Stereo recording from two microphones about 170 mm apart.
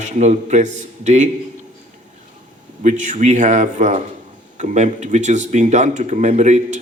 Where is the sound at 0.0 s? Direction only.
45° right (ahead or behind).